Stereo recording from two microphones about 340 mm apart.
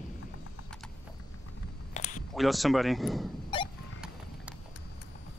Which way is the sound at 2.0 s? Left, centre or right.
Left.